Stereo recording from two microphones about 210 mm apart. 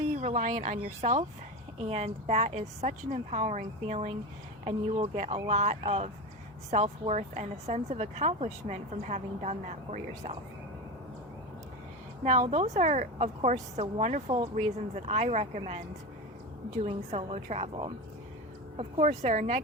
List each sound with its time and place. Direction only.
0.2 s speech: 35° right (ahead or behind)
12.2 s speech: 35° right (ahead or behind)
16.8 s speech: 30° right (ahead or behind)